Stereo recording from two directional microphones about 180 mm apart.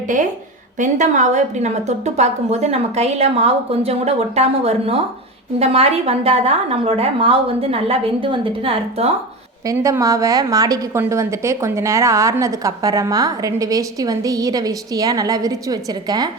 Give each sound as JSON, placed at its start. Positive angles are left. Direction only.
{"t": 0.8, "sound": "a woman's voice", "side_deg": -45}
{"t": 9.6, "sound": "a woman's voice", "side_deg": -15}